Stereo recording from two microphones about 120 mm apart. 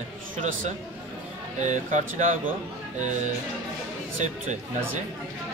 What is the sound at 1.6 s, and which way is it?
Speech, 85° right.